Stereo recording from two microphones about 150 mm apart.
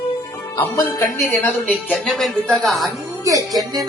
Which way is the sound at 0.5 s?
15° left (ahead or behind).